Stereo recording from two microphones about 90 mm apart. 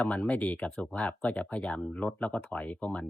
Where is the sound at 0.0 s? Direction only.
15° left (ahead or behind).